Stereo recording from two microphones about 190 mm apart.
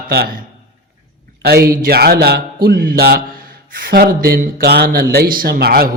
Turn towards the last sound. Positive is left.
turn(degrees=-55)  # may be behind; listen again after turning